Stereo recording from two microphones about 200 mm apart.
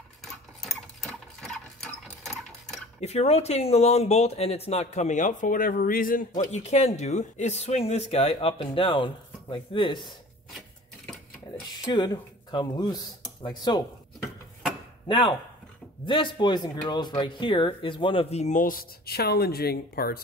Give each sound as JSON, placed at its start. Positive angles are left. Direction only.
{"t": 0.2, "sound": "sewing machine", "side_deg": 0}
{"t": 3.0, "sound": "a man's voice", "side_deg": 30}
{"t": 11.8, "sound": "speech", "side_deg": 20}
{"t": 15.0, "sound": "speech", "side_deg": 25}